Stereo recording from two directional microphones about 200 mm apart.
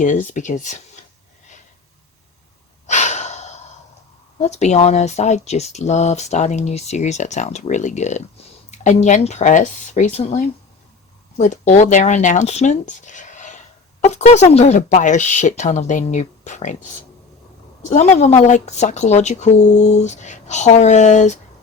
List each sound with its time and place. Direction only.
0.0 s speech: 40° left (ahead or behind)
2.8 s breathing: 35° left (ahead or behind)
4.4 s speech: 35° left (ahead or behind)